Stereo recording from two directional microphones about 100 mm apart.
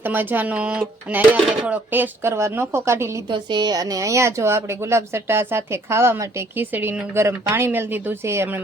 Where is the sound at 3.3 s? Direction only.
45° right (ahead or behind).